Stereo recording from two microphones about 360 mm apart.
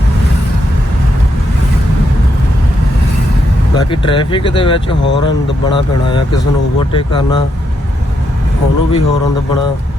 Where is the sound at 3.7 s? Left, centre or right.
Centre.